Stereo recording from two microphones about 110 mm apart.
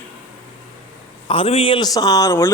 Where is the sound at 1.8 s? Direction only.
35° left (ahead or behind).